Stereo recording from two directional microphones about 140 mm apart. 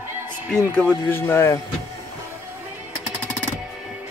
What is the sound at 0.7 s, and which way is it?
Speech, 10° left (ahead or behind).